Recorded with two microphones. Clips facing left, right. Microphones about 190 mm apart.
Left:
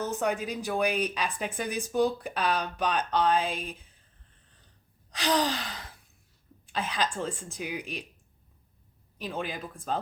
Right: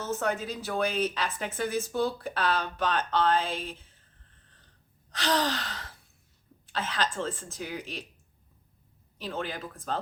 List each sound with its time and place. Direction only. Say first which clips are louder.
0.0 s a woman's voice: left 1 dB; 15° left (ahead or behind)
5.1 s a woman's voice: left 1 dB; 10° left (ahead or behind)
9.1 s a woman's voice: even; 15° left (ahead or behind)